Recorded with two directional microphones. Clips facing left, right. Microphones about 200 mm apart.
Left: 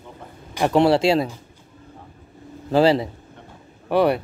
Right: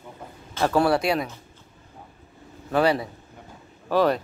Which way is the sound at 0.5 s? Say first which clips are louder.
Left 4 dB; 20° left (ahead or behind).